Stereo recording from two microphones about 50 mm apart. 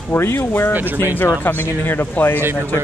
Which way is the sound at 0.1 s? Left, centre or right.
Left.